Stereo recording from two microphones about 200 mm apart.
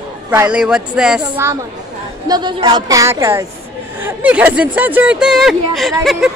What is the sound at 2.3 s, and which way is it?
A woman's voice, 20° right (ahead or behind).